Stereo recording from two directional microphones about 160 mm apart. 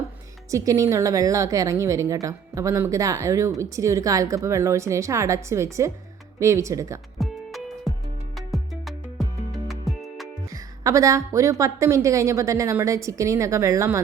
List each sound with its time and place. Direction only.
0.5 s a woman's voice: 20° right (ahead or behind)
7.2 s music: centre (ahead or behind)
8.4 s music: centre (ahead or behind)
10.5 s a woman's voice: 20° right (ahead or behind)